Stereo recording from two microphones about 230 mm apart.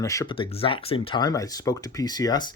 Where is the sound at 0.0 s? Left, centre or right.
Centre.